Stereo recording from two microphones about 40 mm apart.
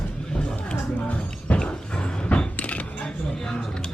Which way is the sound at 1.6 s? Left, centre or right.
Left.